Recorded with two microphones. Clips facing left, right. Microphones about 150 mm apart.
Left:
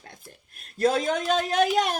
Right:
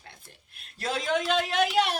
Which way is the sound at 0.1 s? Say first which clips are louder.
Left 5 dB; 45° left (ahead or behind).